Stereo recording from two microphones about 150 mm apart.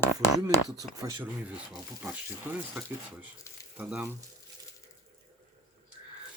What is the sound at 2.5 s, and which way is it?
Speech, 10° right (ahead or behind).